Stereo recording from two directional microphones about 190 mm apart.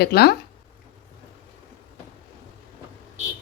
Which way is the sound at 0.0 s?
55° left (ahead or behind).